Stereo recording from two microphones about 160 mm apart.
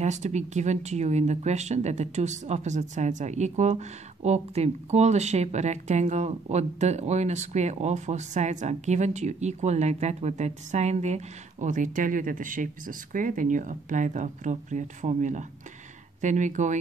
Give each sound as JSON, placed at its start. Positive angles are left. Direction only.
{"t": 0.0, "sound": "speech", "side_deg": -45}